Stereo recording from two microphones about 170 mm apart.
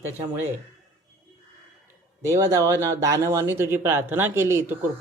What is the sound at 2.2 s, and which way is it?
Speech, 15° right (ahead or behind).